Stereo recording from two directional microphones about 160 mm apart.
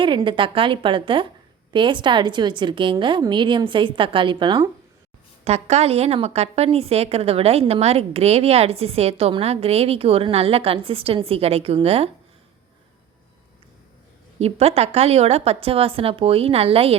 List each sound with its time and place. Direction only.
0.0 s a woman's voice: 30° right (ahead or behind)
5.5 s a woman's voice: 45° right (ahead or behind)
14.3 s a woman's voice: 40° right (ahead or behind)